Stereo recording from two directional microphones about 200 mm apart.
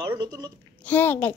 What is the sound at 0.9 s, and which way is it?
Speech, 10° left (ahead or behind).